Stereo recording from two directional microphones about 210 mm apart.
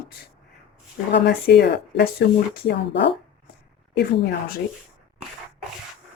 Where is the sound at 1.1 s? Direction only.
50° left (ahead or behind).